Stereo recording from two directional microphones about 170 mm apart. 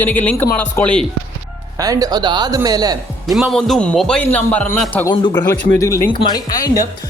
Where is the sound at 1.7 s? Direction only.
20° right (ahead or behind).